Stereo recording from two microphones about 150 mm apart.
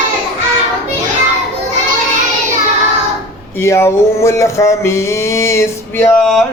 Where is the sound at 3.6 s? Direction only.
20° left (ahead or behind).